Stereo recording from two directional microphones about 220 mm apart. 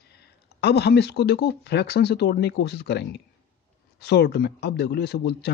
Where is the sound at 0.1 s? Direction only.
50° left (ahead or behind).